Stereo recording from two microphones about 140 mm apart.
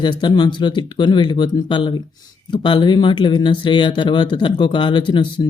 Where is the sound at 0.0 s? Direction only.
35° left (ahead or behind).